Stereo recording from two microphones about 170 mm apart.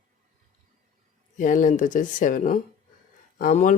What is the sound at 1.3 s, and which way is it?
Speech, 50° left (ahead or behind).